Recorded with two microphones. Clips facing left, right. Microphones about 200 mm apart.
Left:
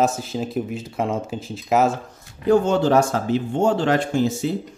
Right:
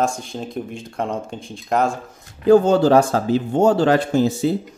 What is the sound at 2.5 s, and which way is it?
Speech, 35° right (ahead or behind).